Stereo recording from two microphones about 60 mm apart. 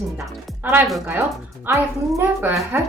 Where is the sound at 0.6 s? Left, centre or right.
Right.